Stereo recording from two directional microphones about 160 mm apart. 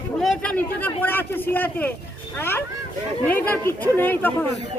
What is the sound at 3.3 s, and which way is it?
Speech, 10° left (ahead or behind).